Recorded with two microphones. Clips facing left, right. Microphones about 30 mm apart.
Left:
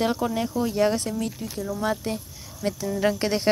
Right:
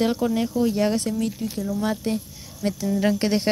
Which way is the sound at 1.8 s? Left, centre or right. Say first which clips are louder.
Right 2 dB; centre.